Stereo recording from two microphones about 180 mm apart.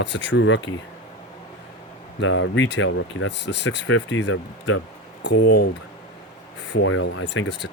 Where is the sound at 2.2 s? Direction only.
90° left.